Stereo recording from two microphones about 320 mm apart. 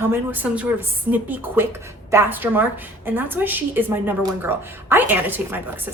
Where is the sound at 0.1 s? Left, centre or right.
Centre.